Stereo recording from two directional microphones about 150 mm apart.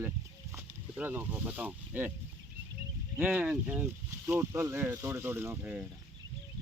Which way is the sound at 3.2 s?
10° right (ahead or behind).